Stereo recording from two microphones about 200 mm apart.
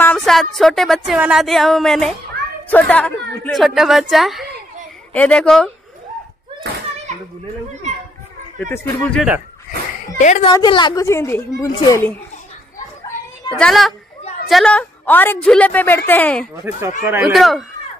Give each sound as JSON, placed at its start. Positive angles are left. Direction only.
{"t": 0.0, "sound": "speech", "side_deg": 5}
{"t": 8.5, "sound": "a woman's voice", "side_deg": 10}
{"t": 10.1, "sound": "a woman's voice", "side_deg": 35}
{"t": 10.5, "sound": "a woman's voice", "side_deg": 20}
{"t": 13.5, "sound": "a woman's voice", "side_deg": 0}
{"t": 17.0, "sound": "speech", "side_deg": -10}